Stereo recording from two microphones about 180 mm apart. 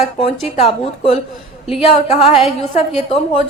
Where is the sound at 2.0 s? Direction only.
35° left (ahead or behind).